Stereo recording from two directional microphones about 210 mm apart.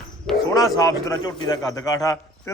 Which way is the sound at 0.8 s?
15° left (ahead or behind).